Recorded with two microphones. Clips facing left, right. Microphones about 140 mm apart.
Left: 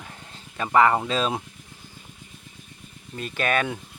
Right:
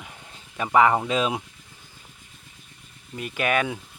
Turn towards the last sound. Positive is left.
turn(degrees=-10)  # may be behind; listen again after turning